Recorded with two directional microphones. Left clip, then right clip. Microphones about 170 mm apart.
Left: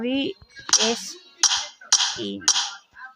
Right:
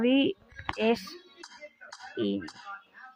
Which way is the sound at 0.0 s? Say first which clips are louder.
Even; 5° left (ahead or behind).